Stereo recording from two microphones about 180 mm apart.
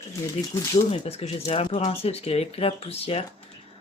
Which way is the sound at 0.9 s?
35° left (ahead or behind).